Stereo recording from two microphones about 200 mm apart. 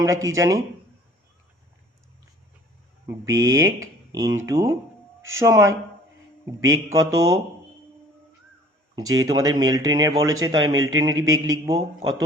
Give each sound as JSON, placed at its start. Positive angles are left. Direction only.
{"t": 0.0, "sound": "speech", "side_deg": -15}
{"t": 3.1, "sound": "speech", "side_deg": -15}
{"t": 6.8, "sound": "speech", "side_deg": -15}
{"t": 9.0, "sound": "speech", "side_deg": -20}